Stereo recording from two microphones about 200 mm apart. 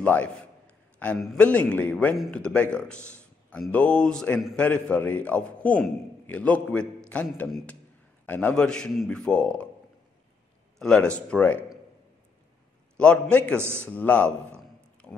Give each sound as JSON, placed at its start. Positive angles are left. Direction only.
{"t": 0.0, "sound": "a man's voice", "side_deg": 5}
{"t": 10.8, "sound": "a man's voice", "side_deg": 5}
{"t": 12.9, "sound": "a man's voice", "side_deg": 5}
{"t": 13.6, "sound": "a man's voice", "side_deg": -10}
{"t": 13.8, "sound": "a sound", "side_deg": 5}